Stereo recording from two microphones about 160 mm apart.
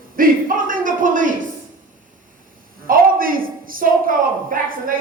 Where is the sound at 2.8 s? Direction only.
65° right (ahead or behind).